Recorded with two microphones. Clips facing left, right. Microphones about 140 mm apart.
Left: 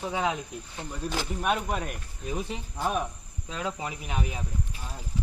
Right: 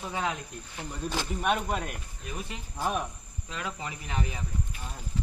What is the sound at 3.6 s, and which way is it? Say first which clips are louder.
Speech: left 4 dB; 20° left (ahead or behind).